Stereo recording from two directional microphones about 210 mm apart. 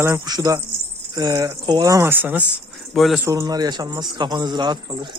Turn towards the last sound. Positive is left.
turn(degrees=-20)  # may be behind; listen again after turning